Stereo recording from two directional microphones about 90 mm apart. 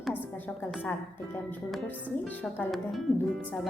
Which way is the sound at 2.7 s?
Centre (ahead or behind).